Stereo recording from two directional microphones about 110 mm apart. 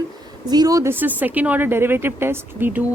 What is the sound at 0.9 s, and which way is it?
A woman's voice, 15° right (ahead or behind).